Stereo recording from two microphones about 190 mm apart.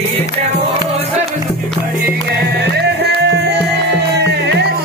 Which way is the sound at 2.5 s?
60° right (ahead or behind).